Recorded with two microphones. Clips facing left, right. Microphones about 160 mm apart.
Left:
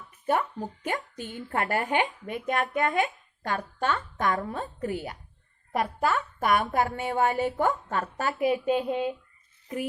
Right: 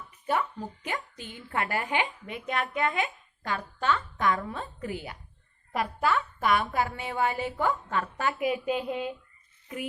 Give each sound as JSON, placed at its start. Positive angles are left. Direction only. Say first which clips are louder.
{"t": 0.3, "sound": "a woman's voice", "louder": "left 2 dB", "side_deg": 45}